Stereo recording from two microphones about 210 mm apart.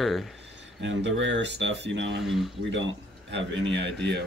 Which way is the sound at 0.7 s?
60° right (ahead or behind).